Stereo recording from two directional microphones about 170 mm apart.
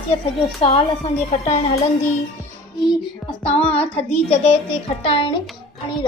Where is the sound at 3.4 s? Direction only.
35° left (ahead or behind).